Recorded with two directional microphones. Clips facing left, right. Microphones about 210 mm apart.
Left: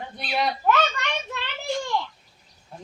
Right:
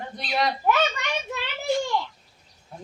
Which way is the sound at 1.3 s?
5° right (ahead or behind).